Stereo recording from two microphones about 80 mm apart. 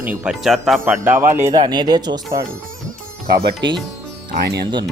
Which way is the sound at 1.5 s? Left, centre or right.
Right.